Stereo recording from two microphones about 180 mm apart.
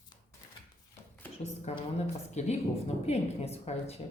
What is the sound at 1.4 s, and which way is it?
Speech, 35° left (ahead or behind).